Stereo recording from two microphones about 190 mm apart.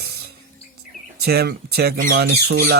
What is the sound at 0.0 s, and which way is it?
Music, 60° right (ahead or behind).